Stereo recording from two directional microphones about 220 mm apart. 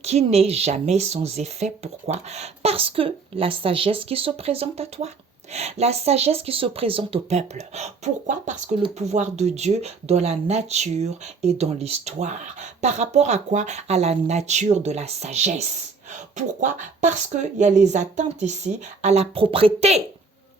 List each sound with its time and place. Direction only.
0.0 s speech: 30° right (ahead or behind)